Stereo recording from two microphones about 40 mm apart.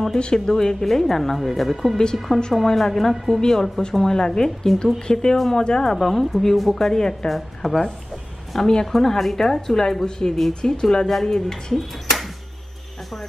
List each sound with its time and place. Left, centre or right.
0.1 s speech: centre
6.0 s speech: centre
7.2 s speech: centre